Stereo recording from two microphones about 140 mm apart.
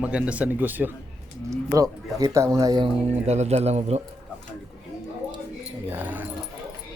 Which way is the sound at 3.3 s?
50° right (ahead or behind).